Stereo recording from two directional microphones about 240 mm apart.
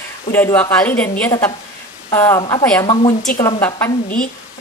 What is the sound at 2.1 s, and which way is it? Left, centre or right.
A woman's voice, centre.